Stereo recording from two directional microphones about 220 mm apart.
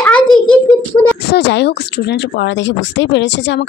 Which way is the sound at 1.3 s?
50° left (ahead or behind).